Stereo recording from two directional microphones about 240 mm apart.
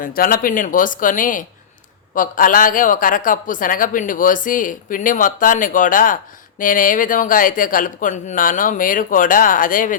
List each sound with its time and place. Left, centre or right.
0.0 s speech: left